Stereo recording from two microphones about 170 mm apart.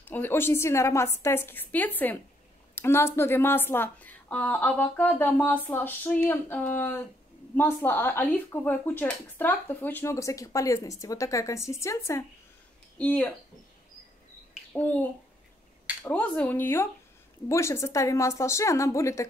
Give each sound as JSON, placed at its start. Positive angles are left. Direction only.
{"t": 0.0, "sound": "speech", "side_deg": 10}
{"t": 14.8, "sound": "speech", "side_deg": 10}